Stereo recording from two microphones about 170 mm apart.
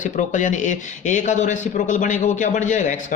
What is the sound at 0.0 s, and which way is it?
Speech, 50° left (ahead or behind).